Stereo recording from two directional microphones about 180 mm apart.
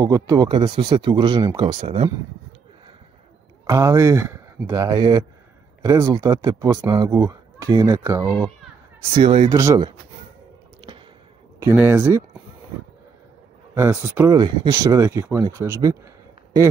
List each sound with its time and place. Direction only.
0.0 s speech: 20° right (ahead or behind)
3.6 s speech: 20° right (ahead or behind)
9.1 s speech: 30° right (ahead or behind)
9.5 s speech: 20° right (ahead or behind)
11.6 s speech: 10° right (ahead or behind)
13.7 s speech: 10° right (ahead or behind)